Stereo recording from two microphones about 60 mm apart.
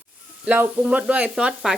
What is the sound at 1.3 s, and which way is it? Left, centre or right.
Speech, centre.